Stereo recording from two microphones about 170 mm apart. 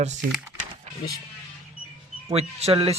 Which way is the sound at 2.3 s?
35° right (ahead or behind).